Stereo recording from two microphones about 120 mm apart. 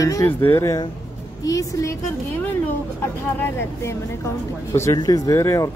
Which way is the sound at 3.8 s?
25° left (ahead or behind).